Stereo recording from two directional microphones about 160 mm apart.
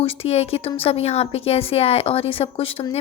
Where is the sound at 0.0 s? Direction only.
35° left (ahead or behind).